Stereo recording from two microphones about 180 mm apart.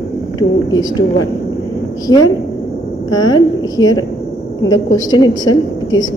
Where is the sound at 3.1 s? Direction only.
25° left (ahead or behind).